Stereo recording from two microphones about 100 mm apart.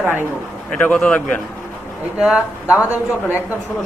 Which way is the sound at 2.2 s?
10° right (ahead or behind).